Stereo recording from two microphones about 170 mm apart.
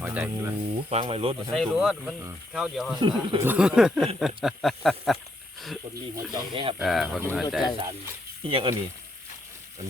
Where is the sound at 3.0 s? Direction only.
25° right (ahead or behind).